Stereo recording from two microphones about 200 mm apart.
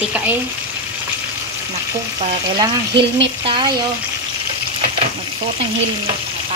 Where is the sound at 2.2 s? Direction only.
25° right (ahead or behind).